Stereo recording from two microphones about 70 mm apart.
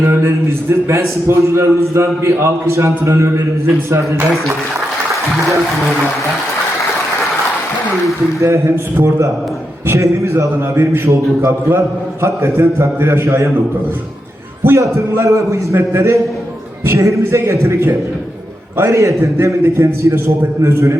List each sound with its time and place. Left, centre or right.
0.0 s a man's voice: right
8.4 s a man's voice: right
14.8 s a man's voice: right